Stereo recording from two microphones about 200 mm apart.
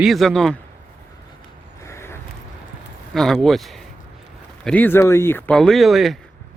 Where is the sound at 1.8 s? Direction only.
15° left (ahead or behind).